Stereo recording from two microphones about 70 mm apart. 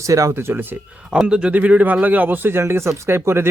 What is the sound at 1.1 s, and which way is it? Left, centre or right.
Speech, centre.